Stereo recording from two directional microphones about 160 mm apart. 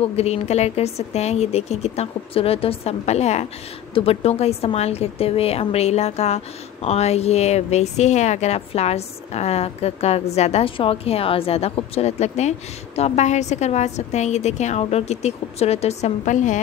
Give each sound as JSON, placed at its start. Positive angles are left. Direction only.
{"t": 0.0, "sound": "a woman's voice", "side_deg": 40}